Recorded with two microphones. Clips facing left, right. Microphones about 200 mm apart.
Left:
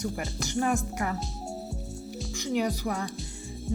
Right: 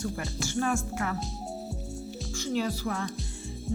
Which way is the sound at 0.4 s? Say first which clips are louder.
Left 1 dB; 15° left (ahead or behind).